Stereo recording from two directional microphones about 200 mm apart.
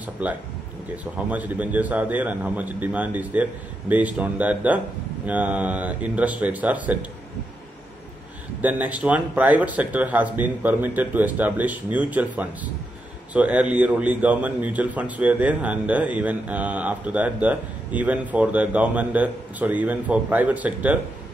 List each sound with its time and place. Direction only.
0.0 s a man's voice: 10° right (ahead or behind)
8.5 s a man's voice: 10° right (ahead or behind)